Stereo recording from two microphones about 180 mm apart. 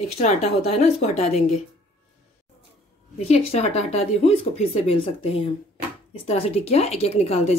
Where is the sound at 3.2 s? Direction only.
35° left (ahead or behind).